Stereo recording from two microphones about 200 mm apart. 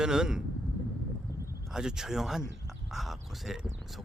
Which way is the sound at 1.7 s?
5° right (ahead or behind).